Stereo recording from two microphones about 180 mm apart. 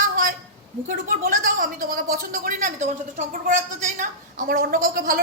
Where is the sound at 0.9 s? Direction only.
45° right (ahead or behind).